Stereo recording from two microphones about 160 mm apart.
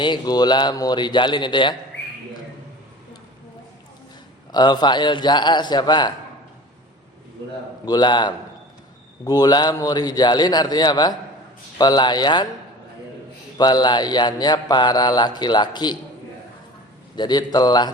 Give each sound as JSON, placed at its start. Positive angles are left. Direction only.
{"t": 0.0, "sound": "mantra", "side_deg": 25}
{"t": 1.9, "sound": "a sound", "side_deg": 90}
{"t": 4.5, "sound": "mantra", "side_deg": 25}
{"t": 7.9, "sound": "mantra", "side_deg": 25}
{"t": 13.6, "sound": "mantra", "side_deg": 25}
{"t": 17.2, "sound": "mantra", "side_deg": 25}